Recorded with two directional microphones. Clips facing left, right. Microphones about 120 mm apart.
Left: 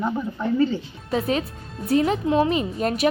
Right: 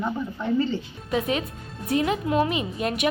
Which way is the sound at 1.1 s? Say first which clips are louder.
Left 2 dB; 35° left (ahead or behind).